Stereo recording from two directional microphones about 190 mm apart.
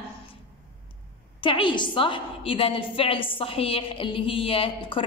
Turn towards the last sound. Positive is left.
turn(degrees=30)  # may be behind; listen again after turning